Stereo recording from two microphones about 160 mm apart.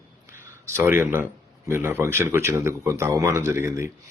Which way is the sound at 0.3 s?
15° right (ahead or behind).